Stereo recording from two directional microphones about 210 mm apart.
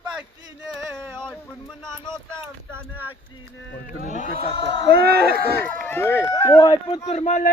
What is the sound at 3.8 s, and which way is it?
Speech, 35° left (ahead or behind).